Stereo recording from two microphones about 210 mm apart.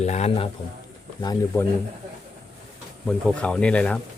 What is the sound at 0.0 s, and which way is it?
Speech, 30° left (ahead or behind).